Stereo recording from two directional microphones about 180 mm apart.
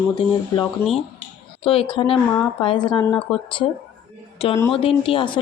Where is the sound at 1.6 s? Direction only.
30° left (ahead or behind).